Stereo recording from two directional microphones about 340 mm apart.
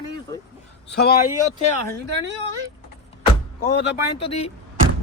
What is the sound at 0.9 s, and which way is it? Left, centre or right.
Speech, left.